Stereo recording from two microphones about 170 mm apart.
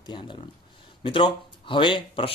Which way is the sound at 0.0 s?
25° left (ahead or behind).